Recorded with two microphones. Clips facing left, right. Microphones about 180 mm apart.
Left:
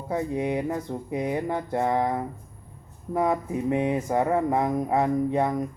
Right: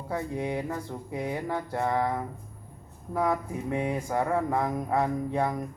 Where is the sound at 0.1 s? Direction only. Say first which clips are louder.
Left 4 dB; 20° left (ahead or behind).